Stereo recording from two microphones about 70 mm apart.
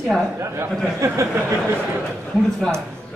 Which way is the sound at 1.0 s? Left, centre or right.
Right.